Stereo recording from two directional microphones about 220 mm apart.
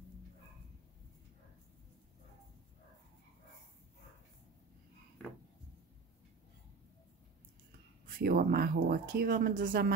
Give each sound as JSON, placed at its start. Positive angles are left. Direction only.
{"t": 8.2, "sound": "speech", "side_deg": -40}